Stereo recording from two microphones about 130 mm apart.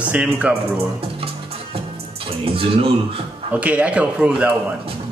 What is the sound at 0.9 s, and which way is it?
Music, 45° right (ahead or behind).